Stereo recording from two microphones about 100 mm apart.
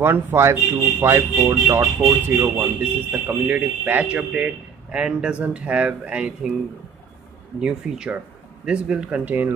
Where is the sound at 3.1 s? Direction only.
15° right (ahead or behind).